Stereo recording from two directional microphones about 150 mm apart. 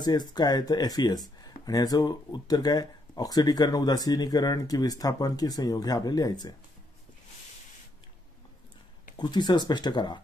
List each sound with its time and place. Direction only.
0.0 s speech: 25° left (ahead or behind)
9.1 s speech: 30° left (ahead or behind)